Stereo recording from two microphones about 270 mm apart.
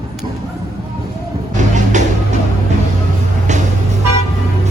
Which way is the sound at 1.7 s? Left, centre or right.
Right.